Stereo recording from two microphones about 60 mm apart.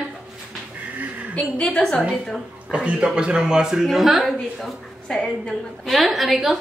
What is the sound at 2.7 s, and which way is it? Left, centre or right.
A man's voice, centre.